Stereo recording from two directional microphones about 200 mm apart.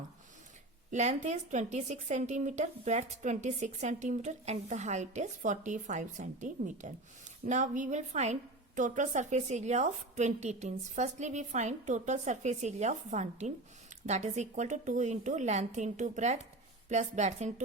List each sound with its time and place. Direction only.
0.9 s a woman's voice: 35° right (ahead or behind)